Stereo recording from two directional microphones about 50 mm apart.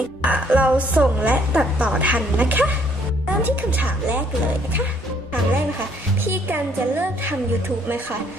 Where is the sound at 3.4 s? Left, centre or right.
Right.